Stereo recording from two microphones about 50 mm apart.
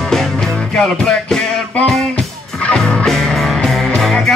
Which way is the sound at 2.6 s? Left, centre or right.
Centre.